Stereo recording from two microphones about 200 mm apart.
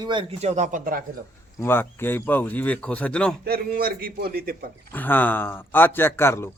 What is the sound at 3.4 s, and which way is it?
Speech, 50° right (ahead or behind).